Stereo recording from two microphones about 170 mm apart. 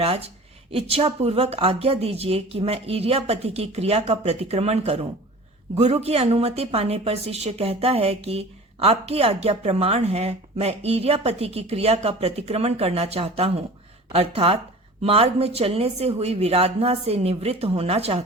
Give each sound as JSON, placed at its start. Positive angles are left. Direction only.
{"t": 0.0, "sound": "a woman's voice", "side_deg": -35}